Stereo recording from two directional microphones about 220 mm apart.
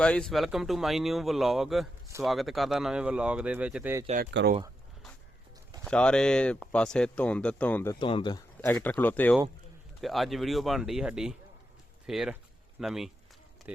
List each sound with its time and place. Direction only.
0.0 s speech: 5° left (ahead or behind)
4.2 s speech: 45° right (ahead or behind)
5.8 s speech: 5° left (ahead or behind)
7.9 s speech: 20° left (ahead or behind)
8.6 s speech: 10° left (ahead or behind)